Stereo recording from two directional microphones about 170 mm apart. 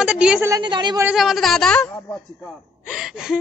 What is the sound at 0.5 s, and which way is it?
Speech, 25° right (ahead or behind).